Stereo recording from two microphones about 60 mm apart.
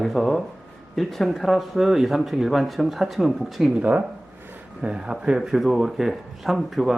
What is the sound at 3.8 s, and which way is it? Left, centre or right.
Speech, right.